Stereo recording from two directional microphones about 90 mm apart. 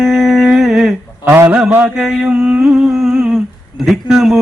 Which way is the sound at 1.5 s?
5° right (ahead or behind).